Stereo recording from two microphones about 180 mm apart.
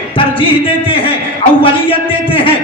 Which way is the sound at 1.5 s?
30° left (ahead or behind).